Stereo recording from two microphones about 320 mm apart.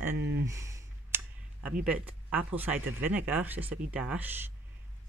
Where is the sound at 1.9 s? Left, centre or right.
Centre.